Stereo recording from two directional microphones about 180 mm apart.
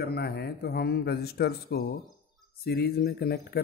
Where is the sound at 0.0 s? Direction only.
60° left (ahead or behind).